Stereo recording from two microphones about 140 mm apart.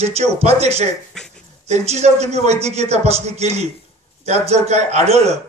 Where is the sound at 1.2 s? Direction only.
5° left (ahead or behind).